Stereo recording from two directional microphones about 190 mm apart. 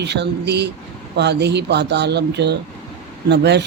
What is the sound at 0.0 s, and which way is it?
Speech, 60° right (ahead or behind).